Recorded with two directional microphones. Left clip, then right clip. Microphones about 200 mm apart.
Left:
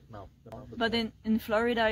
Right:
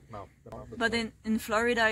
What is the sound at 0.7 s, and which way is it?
Speech, 20° left (ahead or behind).